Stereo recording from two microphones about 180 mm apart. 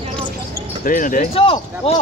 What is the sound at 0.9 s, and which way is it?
Speech, 45° left (ahead or behind).